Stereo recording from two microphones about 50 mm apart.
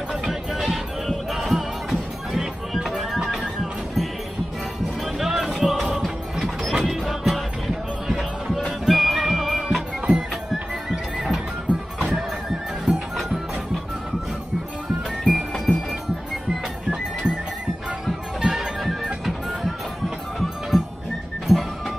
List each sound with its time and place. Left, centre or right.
0.3 s music: centre
5.0 s music: centre
10.0 s music: centre
15.2 s music: centre
16.8 s music: centre